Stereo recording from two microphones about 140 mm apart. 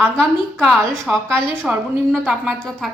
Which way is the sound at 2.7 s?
5° left (ahead or behind).